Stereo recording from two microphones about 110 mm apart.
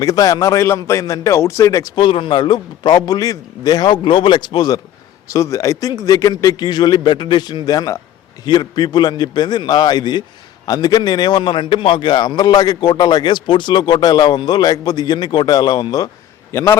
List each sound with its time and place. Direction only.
0.0 s a man's voice: 35° left (ahead or behind)
2.0 s a man's voice: 50° left (ahead or behind)
5.3 s a man's voice: 30° left (ahead or behind)
16.5 s a man's voice: 25° left (ahead or behind)